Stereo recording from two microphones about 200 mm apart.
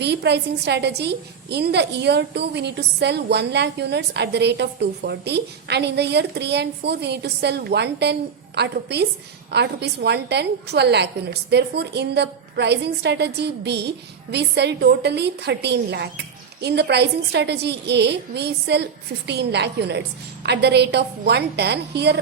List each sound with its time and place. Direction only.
0.0 s a woman's voice: 60° right (ahead or behind)